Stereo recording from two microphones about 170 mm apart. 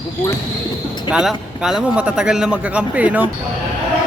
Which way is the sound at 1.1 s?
5° right (ahead or behind).